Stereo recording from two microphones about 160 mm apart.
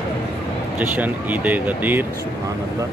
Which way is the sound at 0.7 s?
10° right (ahead or behind).